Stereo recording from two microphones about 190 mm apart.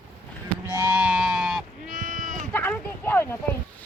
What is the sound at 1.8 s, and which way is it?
Sheep, 45° right (ahead or behind).